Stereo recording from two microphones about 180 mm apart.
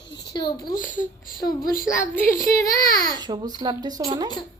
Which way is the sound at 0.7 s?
50° left (ahead or behind).